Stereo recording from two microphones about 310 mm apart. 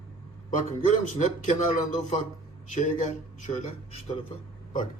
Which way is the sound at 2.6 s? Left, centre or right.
Left.